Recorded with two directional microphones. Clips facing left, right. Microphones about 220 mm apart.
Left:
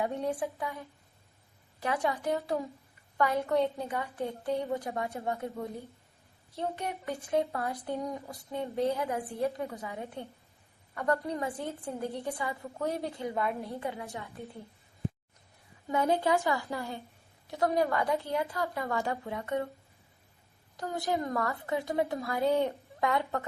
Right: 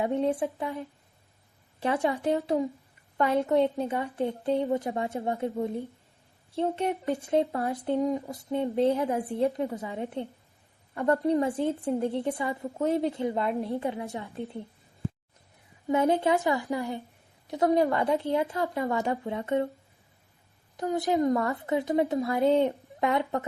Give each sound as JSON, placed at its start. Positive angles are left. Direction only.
{"t": 0.0, "sound": "speech", "side_deg": -25}
{"t": 15.9, "sound": "speech", "side_deg": -20}
{"t": 20.7, "sound": "speech", "side_deg": -20}